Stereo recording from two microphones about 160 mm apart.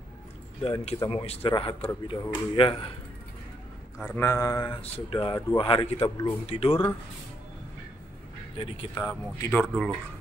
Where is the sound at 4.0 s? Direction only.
15° left (ahead or behind).